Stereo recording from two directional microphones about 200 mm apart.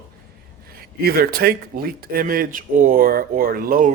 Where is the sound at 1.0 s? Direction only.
50° right (ahead or behind).